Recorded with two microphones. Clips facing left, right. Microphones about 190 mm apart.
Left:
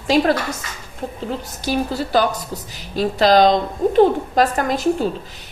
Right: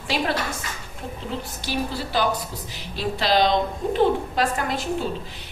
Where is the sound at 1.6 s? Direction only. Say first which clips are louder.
Left 7 dB; 45° left (ahead or behind).